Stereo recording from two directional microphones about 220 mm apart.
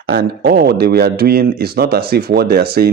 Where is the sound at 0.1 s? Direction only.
45° right (ahead or behind).